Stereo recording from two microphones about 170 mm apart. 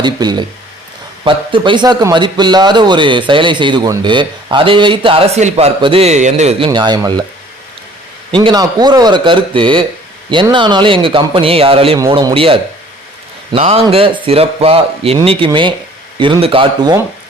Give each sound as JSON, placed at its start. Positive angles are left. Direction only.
{"t": 0.0, "sound": "a man's voice", "side_deg": -25}
{"t": 6.7, "sound": "a man's voice", "side_deg": -25}
{"t": 8.3, "sound": "a man's voice", "side_deg": -25}